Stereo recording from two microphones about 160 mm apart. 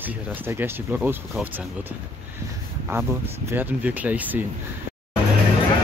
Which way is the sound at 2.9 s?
15° right (ahead or behind).